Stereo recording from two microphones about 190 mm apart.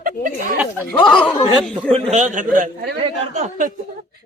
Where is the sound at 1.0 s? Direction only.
5° left (ahead or behind).